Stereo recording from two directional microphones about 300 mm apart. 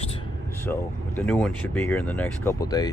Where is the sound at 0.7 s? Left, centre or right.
Centre.